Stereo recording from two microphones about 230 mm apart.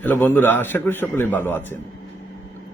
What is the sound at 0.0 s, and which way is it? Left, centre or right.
Speech, centre.